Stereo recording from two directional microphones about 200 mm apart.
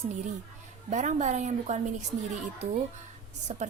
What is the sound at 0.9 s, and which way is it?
Speech, 35° right (ahead or behind).